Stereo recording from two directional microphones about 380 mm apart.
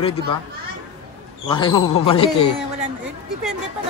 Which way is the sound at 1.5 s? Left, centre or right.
Centre.